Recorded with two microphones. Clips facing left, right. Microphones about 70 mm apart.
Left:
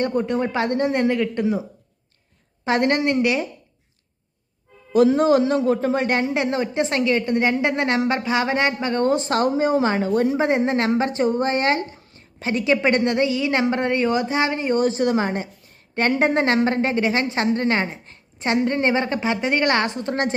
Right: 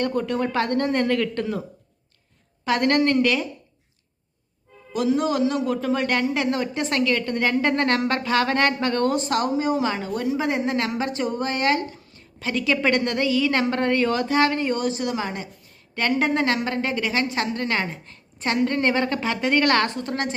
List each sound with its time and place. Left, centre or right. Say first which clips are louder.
0.0 s a man's voice: left 2 dB; left
2.6 s a man's voice: even; left
4.9 s a man's voice: left 6 dB; left; by 14.8 s centre
14.8 s a man's voice: left 6 dB; left